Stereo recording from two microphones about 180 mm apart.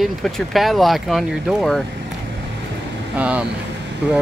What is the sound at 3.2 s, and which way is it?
Speech, 5° right (ahead or behind).